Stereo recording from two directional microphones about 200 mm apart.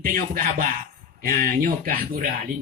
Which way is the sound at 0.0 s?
45° right (ahead or behind).